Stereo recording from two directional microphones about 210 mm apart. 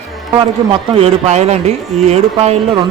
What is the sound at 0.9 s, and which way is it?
Speech, 30° right (ahead or behind).